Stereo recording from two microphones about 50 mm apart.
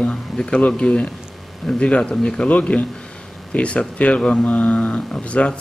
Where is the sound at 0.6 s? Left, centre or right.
Left.